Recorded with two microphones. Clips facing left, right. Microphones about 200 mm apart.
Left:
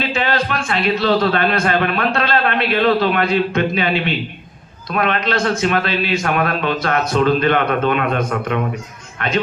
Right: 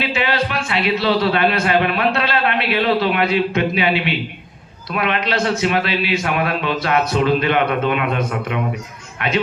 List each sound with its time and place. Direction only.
0.0 s a man's voice: 45° left (ahead or behind)